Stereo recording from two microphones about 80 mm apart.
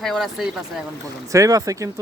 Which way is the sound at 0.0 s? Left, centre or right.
Centre.